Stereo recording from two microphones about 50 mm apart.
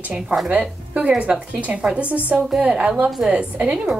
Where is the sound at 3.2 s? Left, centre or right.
Right.